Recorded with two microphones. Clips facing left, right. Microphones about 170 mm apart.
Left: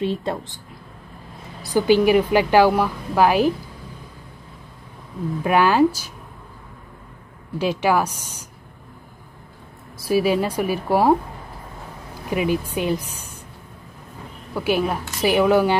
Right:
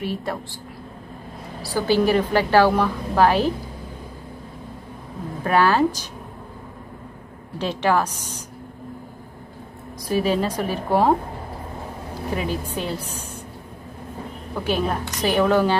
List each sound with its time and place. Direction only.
0.0 s speech: 20° left (ahead or behind)
1.6 s a woman's voice: 15° left (ahead or behind)
5.4 s a woman's voice: 15° left (ahead or behind)
7.5 s a woman's voice: 10° left (ahead or behind)
9.9 s a woman's voice: 10° left (ahead or behind)
12.3 s a woman's voice: 15° left (ahead or behind)
14.5 s a woman's voice: 10° left (ahead or behind)